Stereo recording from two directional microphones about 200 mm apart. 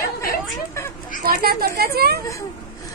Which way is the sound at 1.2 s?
50° right (ahead or behind).